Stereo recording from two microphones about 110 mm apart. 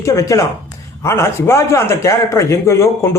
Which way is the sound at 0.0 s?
25° left (ahead or behind).